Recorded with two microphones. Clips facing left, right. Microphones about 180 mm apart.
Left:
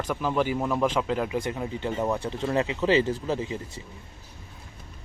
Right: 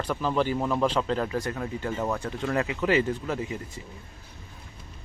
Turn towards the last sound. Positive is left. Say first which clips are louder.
# left 2 dB
turn(degrees=30)  # may be behind; listen again after turning